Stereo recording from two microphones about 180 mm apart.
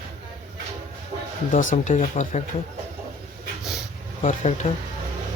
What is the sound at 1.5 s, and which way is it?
Speech, 45° left (ahead or behind).